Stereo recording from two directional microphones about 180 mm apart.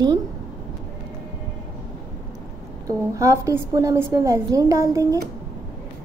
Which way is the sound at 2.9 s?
20° right (ahead or behind).